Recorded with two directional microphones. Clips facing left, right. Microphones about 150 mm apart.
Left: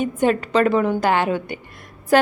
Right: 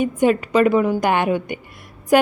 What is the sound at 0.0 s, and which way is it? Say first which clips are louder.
A woman's voice: right 2 dB; 10° right (ahead or behind).